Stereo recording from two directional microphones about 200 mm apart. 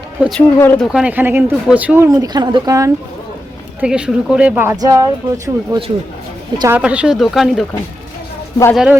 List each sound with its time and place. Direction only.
0.2 s speech: centre (ahead or behind)
0.6 s speech: 10° left (ahead or behind)
0.9 s speech: 10° right (ahead or behind)
3.8 s speech: 5° right (ahead or behind)
8.7 s speech: 5° right (ahead or behind)